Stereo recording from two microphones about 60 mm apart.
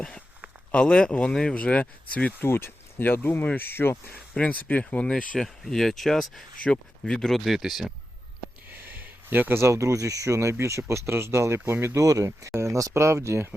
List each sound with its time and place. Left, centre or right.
0.7 s speech: centre
2.4 s speech: left
4.1 s speech: left
5.4 s speech: centre
8.7 s a sound: right
9.6 s speech: right
11.9 s speech: right